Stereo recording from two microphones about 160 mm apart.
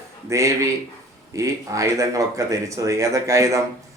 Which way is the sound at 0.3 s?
20° right (ahead or behind).